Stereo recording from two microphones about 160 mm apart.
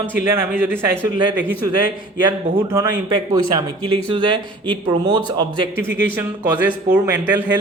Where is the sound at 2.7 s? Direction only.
20° right (ahead or behind).